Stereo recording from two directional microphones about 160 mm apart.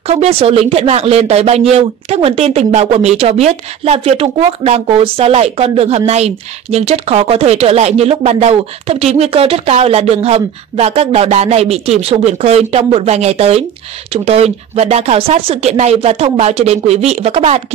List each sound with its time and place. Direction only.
0.0 s speech: 40° right (ahead or behind)